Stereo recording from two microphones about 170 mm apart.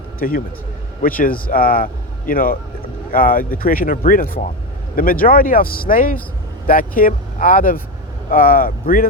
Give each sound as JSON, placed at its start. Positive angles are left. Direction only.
{"t": 0.2, "sound": "speech", "side_deg": 55}